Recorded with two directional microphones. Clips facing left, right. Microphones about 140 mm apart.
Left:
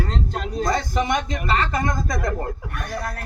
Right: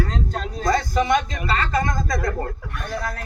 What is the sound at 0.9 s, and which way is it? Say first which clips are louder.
Speech: right 2 dB; 20° left (ahead or behind).